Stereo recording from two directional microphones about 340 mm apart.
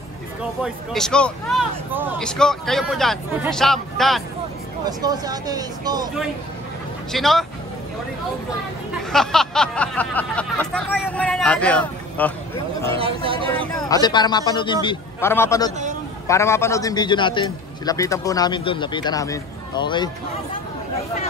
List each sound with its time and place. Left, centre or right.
0.9 s speech: centre
4.8 s speech: centre
7.1 s speech: centre
9.1 s speech: centre
12.9 s speech: centre
13.6 s a man's voice: centre